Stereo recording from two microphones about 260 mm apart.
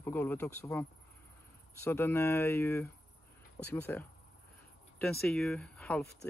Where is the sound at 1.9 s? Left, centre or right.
Centre.